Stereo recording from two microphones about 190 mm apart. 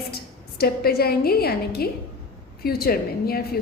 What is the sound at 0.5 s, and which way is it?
A woman's voice, 55° left (ahead or behind).